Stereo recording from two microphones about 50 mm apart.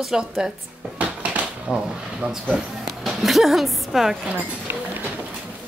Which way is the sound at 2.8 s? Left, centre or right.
Centre.